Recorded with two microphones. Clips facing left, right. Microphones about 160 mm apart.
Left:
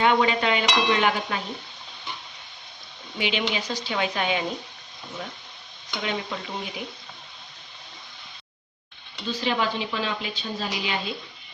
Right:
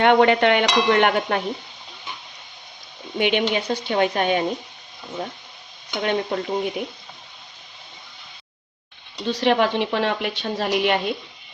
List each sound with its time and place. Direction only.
0.0 s speech: 60° right (ahead or behind)
3.2 s speech: 55° right (ahead or behind)
6.0 s speech: 50° right (ahead or behind)
9.2 s speech: 65° right (ahead or behind)